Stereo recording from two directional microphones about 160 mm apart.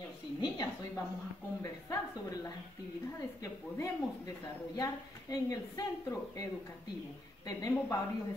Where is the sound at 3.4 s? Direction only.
20° left (ahead or behind).